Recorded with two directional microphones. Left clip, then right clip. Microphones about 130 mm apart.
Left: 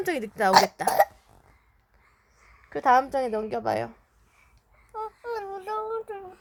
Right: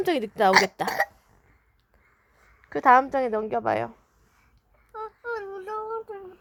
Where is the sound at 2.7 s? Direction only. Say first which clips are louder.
Right 3 dB; 35° right (ahead or behind).